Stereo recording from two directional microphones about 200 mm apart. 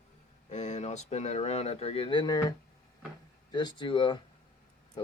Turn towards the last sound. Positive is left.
turn(degrees=25)  # may be behind; listen again after turning